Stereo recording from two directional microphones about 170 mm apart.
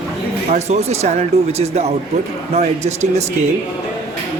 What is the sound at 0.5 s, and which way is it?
A man's voice, 40° right (ahead or behind).